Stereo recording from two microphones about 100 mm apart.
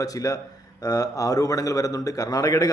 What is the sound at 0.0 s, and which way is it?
A man's voice, 35° left (ahead or behind).